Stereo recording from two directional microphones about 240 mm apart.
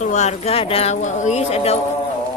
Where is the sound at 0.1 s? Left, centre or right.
Left.